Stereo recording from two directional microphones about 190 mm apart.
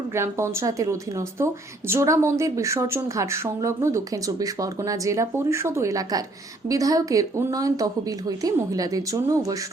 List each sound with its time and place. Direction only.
0.1 s speech: 15° right (ahead or behind)